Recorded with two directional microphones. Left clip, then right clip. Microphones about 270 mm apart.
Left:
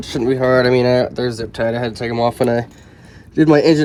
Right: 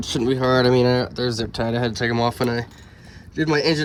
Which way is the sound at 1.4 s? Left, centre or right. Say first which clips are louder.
Left 4 dB; right.